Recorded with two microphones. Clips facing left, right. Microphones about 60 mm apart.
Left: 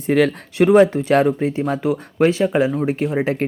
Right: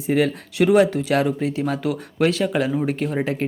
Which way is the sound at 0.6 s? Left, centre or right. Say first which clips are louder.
Left 4 dB; left.